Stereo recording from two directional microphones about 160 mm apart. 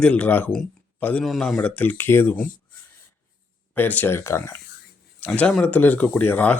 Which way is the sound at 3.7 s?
10° left (ahead or behind).